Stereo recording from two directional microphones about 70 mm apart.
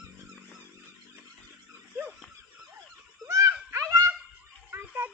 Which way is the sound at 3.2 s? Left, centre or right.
Right.